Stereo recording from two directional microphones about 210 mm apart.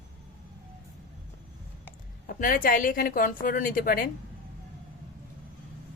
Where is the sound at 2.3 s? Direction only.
40° left (ahead or behind).